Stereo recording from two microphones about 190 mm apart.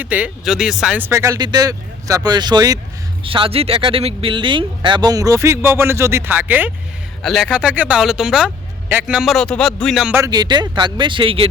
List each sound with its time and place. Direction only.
0.0 s speech: 5° right (ahead or behind)
10.2 s speech: 20° right (ahead or behind)